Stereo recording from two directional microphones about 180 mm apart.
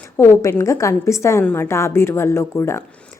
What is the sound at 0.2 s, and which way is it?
A woman's voice, 15° left (ahead or behind).